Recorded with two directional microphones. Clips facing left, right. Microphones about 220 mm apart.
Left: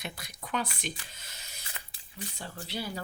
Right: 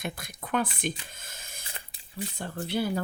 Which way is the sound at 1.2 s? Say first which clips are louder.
Right 4 dB; 50° right (ahead or behind).